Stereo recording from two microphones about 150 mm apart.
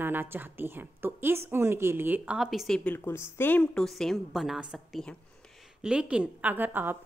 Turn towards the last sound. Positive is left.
turn(degrees=-15)  # may be behind; listen again after turning